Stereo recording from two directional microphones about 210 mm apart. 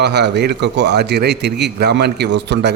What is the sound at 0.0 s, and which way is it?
Speech, 50° right (ahead or behind).